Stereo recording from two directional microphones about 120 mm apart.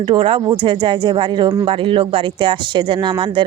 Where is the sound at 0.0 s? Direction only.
45° right (ahead or behind).